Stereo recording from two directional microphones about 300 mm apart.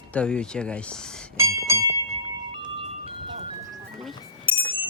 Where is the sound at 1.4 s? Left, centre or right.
Centre.